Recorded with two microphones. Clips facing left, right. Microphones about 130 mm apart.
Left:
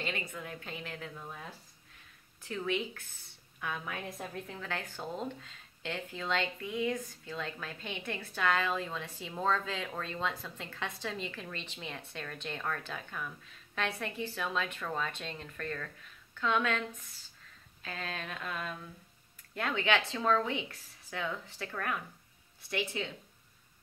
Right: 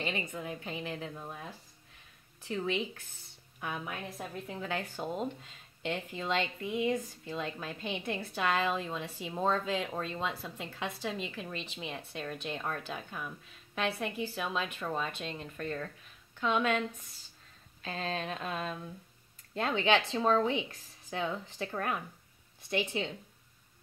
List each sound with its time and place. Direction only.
0.0 s a woman's voice: 25° right (ahead or behind)
2.4 s a woman's voice: 20° right (ahead or behind)
17.8 s a woman's voice: 25° right (ahead or behind)